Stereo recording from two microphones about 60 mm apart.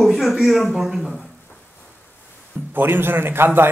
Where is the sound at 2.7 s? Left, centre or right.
Right.